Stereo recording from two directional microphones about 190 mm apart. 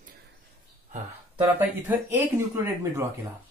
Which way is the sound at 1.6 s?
10° right (ahead or behind).